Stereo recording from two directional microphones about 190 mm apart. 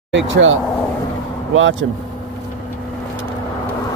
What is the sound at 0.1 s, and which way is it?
Speech, 85° right.